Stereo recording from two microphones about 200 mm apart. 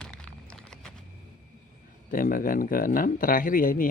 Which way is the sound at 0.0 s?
5° left (ahead or behind).